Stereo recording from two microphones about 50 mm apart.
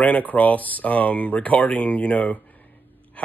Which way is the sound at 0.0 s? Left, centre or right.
Left.